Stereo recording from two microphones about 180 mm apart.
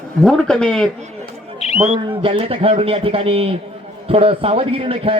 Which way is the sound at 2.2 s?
30° right (ahead or behind).